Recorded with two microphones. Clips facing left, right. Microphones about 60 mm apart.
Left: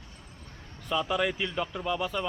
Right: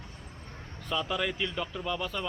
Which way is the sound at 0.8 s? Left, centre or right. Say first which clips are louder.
Left 3 dB; centre.